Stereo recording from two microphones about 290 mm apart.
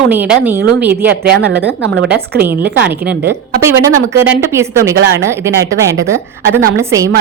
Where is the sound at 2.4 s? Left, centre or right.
Centre.